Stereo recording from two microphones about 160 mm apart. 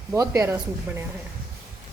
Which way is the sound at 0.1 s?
20° right (ahead or behind).